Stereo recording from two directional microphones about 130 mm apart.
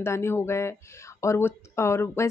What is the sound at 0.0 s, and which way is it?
Speech, 20° left (ahead or behind).